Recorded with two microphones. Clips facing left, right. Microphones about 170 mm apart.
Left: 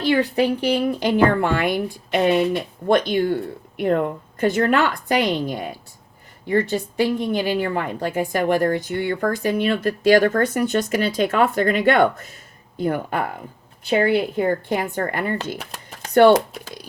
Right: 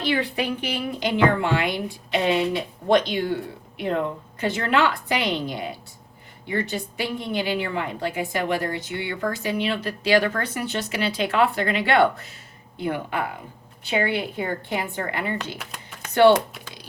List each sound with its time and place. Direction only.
0.0 s a woman's voice: 45° left (ahead or behind)
15.5 s a sound: 35° left (ahead or behind)
16.1 s speech: 45° left (ahead or behind)